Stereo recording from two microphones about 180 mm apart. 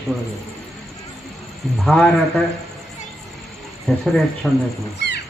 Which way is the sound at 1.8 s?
5° left (ahead or behind).